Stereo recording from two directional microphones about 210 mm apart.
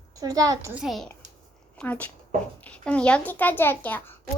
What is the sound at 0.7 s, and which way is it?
A child's voice, centre (ahead or behind).